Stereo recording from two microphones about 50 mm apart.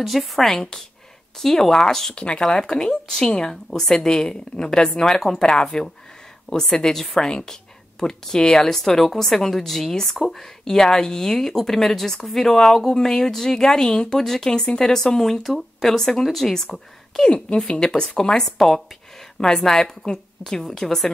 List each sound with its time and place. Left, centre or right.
0.0 s a woman's voice: centre
2.1 s a woman's voice: centre